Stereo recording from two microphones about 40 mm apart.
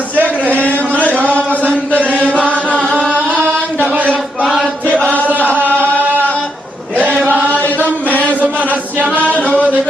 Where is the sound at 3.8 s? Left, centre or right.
Right.